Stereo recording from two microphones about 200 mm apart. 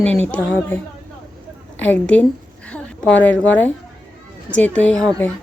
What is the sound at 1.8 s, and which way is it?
A woman's voice, 5° left (ahead or behind).